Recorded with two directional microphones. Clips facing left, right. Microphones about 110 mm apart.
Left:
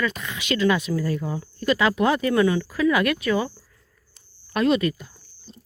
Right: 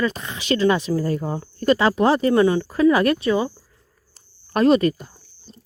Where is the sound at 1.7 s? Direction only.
35° right (ahead or behind).